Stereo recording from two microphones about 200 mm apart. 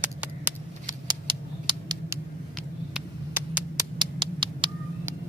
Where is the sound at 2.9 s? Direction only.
10° right (ahead or behind).